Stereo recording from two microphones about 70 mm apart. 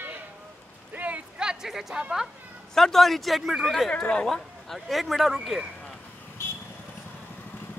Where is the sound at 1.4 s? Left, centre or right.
Centre.